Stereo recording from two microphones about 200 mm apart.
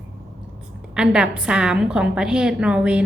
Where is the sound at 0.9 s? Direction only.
5° right (ahead or behind).